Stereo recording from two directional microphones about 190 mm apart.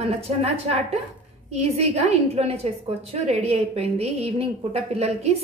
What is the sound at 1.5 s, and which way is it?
A woman's voice, 35° right (ahead or behind).